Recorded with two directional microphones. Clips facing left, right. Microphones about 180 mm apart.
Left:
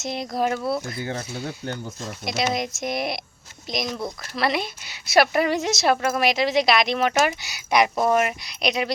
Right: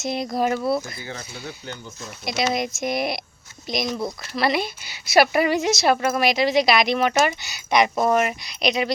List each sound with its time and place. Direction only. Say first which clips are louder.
0.0 s a woman's voice: right 2 dB; centre (ahead or behind)
0.9 s speech: left 6 dB; 50° left (ahead or behind)
2.2 s a woman's voice: right 1 dB; centre (ahead or behind)